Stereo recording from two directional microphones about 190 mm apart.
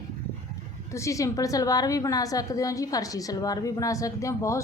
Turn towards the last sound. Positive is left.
turn(degrees=15)  # may be behind; listen again after turning